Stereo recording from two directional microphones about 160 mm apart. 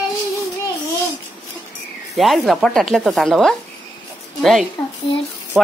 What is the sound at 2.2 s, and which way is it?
Speech, centre (ahead or behind).